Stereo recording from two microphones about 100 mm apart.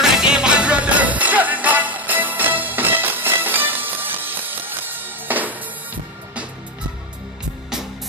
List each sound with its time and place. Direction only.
0.0 s music: 5° right (ahead or behind)